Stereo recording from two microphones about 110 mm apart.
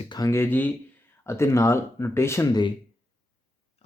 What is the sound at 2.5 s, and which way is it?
Speech, 40° left (ahead or behind).